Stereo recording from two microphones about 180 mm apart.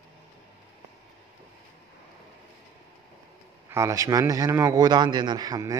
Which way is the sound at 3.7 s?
15° right (ahead or behind).